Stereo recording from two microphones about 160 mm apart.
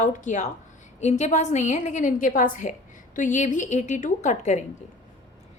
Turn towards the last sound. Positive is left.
turn(degrees=45)  # may be behind; listen again after turning